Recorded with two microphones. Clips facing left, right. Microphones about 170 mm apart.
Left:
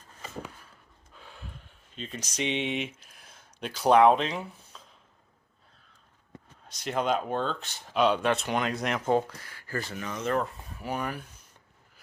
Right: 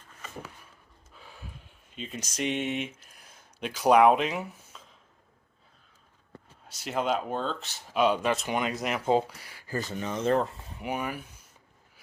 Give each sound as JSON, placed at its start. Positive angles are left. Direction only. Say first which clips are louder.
{"t": 1.1, "sound": "gasp", "louder": "left 1 dB", "side_deg": -10}
{"t": 2.0, "sound": "speech", "louder": "even", "side_deg": -10}
{"t": 3.0, "sound": "a sound", "louder": "even", "side_deg": 0}
{"t": 6.5, "sound": "speech", "louder": "left 1 dB", "side_deg": -5}
{"t": 9.0, "sound": "speech", "louder": "right 2 dB", "side_deg": -15}
{"t": 9.9, "sound": "speech", "louder": "right 4 dB", "side_deg": -30}
{"t": 10.9, "sound": "speech", "louder": "even", "side_deg": -10}